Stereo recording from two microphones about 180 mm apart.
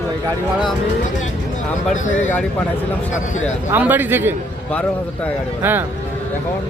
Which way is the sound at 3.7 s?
10° right (ahead or behind).